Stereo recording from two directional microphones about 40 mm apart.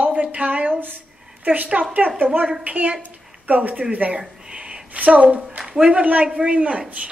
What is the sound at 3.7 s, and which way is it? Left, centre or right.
Speech, right.